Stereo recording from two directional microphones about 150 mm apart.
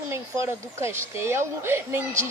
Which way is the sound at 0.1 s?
20° right (ahead or behind).